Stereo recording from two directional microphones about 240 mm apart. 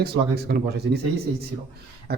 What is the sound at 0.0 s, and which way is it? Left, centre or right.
Speech, right.